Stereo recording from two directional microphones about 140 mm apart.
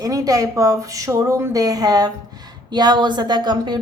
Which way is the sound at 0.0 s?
25° right (ahead or behind).